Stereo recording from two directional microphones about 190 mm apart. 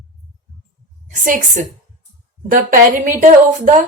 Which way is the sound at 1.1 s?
45° right (ahead or behind).